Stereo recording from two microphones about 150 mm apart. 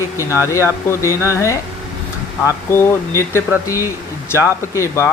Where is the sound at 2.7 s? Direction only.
15° left (ahead or behind).